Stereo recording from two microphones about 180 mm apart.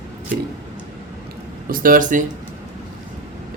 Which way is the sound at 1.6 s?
50° right (ahead or behind).